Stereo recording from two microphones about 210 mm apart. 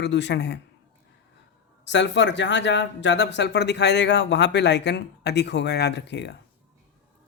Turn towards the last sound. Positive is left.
turn(degrees=55)  # may be behind; listen again after turning